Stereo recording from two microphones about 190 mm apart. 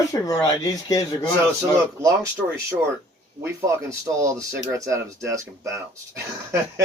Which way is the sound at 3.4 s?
15° right (ahead or behind).